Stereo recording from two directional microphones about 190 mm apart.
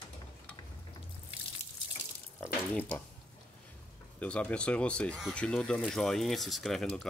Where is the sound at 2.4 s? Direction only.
10° left (ahead or behind).